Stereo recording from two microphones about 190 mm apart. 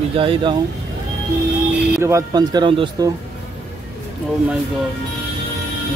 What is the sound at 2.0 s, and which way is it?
Speech, 20° right (ahead or behind).